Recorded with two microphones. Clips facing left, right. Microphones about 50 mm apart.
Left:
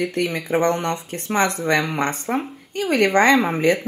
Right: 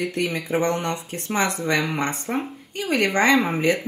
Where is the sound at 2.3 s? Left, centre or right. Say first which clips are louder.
Left 3 dB; left.